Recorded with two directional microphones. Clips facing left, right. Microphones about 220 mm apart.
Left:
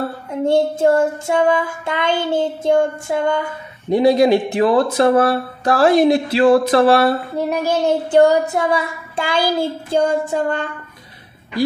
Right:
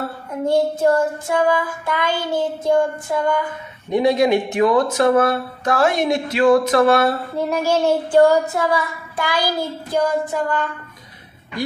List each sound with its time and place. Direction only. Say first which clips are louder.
0.3 s speech: left 2 dB; 25° left (ahead or behind)
3.9 s speech: left 3 dB; 35° left (ahead or behind)
7.3 s speech: even; 20° left (ahead or behind)